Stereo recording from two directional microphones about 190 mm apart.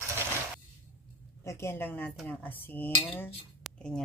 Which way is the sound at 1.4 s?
15° left (ahead or behind).